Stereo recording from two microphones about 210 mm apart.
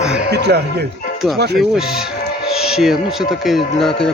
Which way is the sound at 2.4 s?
Centre (ahead or behind).